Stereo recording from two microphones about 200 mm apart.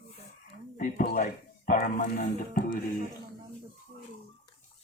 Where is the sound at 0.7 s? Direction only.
40° left (ahead or behind).